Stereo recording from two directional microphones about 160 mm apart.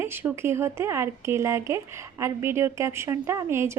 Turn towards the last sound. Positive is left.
turn(degrees=-15)  # may be behind; listen again after turning